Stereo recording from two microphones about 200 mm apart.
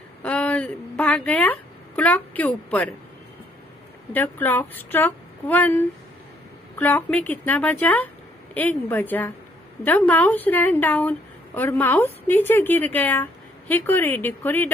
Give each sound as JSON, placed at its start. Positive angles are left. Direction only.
{"t": 0.2, "sound": "a sound", "side_deg": 5}
{"t": 2.0, "sound": "a woman's voice", "side_deg": 10}
{"t": 4.1, "sound": "a woman's voice", "side_deg": 10}
{"t": 6.8, "sound": "a woman's voice", "side_deg": 10}